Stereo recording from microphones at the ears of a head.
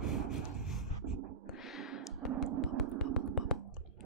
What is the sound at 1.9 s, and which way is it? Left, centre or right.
Music, right.